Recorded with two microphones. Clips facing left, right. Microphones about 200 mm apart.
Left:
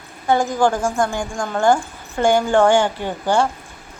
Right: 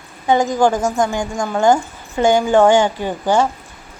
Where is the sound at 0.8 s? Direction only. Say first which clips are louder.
Right 2 dB; 20° right (ahead or behind).